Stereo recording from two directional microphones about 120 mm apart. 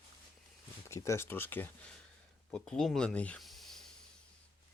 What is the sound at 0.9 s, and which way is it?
Speech, 25° left (ahead or behind).